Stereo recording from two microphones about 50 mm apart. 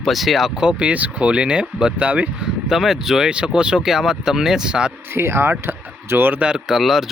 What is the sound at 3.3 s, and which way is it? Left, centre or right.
Speech, centre.